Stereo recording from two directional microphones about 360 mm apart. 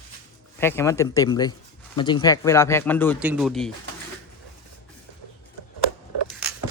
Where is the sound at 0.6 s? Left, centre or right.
Centre.